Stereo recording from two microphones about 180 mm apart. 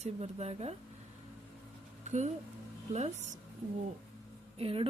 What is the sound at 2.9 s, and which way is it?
Speech, 40° right (ahead or behind).